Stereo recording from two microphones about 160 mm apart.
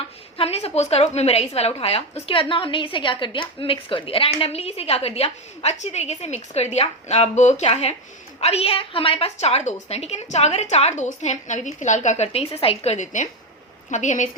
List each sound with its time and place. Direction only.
0.3 s a woman's voice: 40° left (ahead or behind)